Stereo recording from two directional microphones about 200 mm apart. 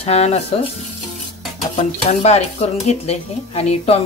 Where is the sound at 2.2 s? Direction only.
30° left (ahead or behind).